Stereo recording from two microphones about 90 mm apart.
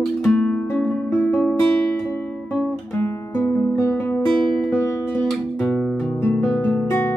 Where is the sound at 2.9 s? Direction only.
25° left (ahead or behind).